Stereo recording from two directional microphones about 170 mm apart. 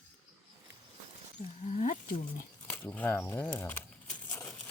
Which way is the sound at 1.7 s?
45° left (ahead or behind).